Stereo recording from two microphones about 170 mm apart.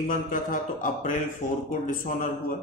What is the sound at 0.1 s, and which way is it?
A man's voice, 50° left (ahead or behind).